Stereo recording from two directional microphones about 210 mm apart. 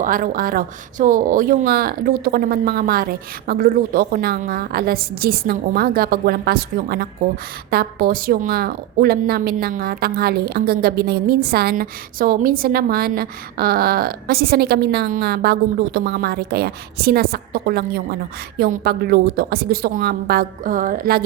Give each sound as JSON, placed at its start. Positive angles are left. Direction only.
{"t": 0.0, "sound": "a woman's voice", "side_deg": -40}